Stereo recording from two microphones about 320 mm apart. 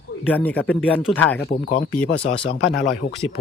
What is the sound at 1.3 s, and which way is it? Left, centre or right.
Speech, left.